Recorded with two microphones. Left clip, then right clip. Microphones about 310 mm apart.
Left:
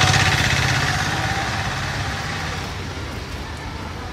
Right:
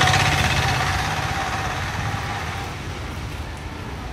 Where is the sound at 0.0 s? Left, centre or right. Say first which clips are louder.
Left 1 dB; centre.